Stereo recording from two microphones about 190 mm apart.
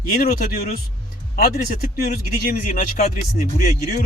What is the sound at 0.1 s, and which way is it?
Speech, 50° left (ahead or behind).